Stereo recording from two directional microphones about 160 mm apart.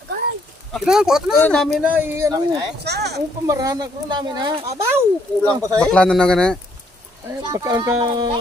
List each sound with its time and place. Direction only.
0.7 s speech: 5° right (ahead or behind)
1.8 s speech: 10° right (ahead or behind)
2.8 s a sound: 90° right
3.4 s speech: 20° right (ahead or behind)
5.8 s speech: 5° left (ahead or behind)
7.2 s speech: 20° right (ahead or behind)